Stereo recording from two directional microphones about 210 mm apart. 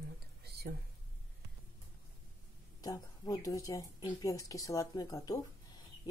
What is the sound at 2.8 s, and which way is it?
Speech, 15° left (ahead or behind).